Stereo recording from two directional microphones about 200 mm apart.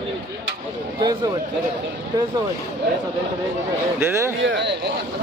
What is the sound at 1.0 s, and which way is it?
Speech, 20° right (ahead or behind).